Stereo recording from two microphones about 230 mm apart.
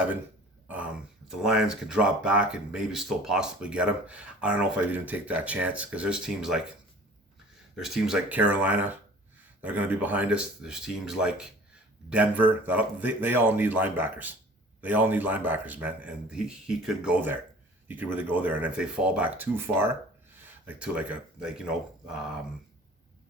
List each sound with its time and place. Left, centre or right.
1.4 s speech: centre
7.9 s speech: centre